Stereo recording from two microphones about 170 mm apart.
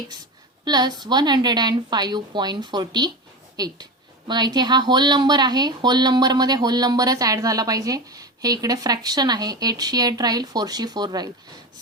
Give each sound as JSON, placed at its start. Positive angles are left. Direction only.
{"t": 0.6, "sound": "speech", "side_deg": -25}